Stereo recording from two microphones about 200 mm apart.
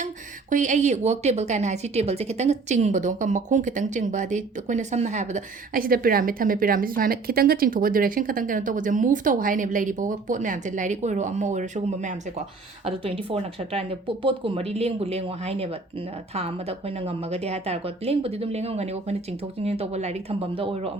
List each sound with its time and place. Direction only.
0.5 s a woman's voice: 40° right (ahead or behind)